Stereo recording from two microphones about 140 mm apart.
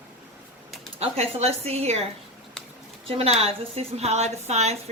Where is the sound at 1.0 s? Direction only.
45° right (ahead or behind).